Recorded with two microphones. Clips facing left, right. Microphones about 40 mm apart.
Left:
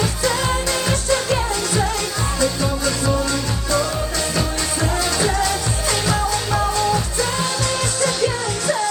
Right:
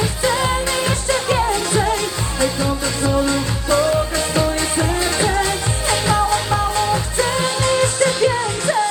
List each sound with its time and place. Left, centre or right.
0.0 s music: right